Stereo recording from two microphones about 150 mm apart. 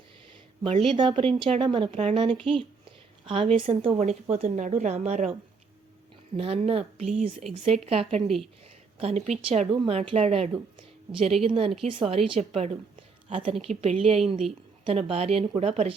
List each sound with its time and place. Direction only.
0.6 s speech: 35° right (ahead or behind); by 5.3 s 50° right (ahead or behind)
6.3 s speech: 40° right (ahead or behind)
10.8 s a sound: 35° right (ahead or behind)
11.4 s speech: 35° right (ahead or behind)